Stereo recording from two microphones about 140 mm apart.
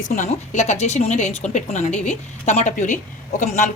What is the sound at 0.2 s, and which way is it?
A woman's voice, 55° left (ahead or behind).